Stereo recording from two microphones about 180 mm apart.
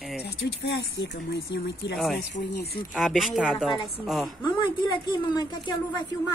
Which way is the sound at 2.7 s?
Centre (ahead or behind).